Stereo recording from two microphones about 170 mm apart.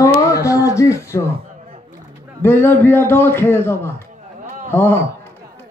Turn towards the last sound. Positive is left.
turn(degrees=15)  # may be behind; listen again after turning